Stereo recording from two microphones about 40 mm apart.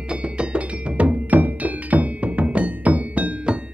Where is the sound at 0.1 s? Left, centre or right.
Right.